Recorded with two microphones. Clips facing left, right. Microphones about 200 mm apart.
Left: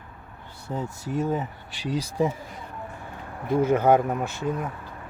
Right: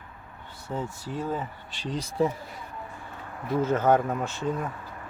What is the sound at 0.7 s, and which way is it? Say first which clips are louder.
Speech: left 3 dB; 15° left (ahead or behind).